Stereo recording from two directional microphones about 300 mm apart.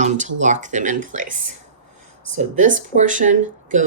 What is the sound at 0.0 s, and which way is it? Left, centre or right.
Speech, right.